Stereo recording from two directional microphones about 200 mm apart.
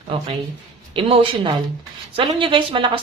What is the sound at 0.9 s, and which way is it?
A woman's voice, 25° right (ahead or behind).